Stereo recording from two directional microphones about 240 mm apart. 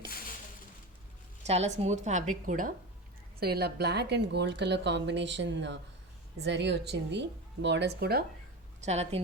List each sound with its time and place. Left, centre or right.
1.5 s a woman's voice: right
8.8 s a woman's voice: right